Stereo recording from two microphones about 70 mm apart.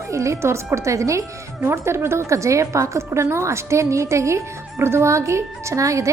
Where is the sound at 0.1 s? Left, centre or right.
Right.